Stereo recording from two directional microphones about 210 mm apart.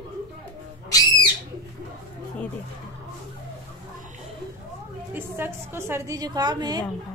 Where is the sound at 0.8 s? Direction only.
15° left (ahead or behind).